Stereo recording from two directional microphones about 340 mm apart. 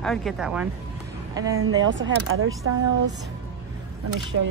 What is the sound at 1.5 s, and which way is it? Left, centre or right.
Speech, right.